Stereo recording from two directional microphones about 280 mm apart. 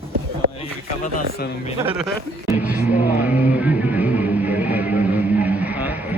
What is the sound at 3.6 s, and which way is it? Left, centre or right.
Music, centre.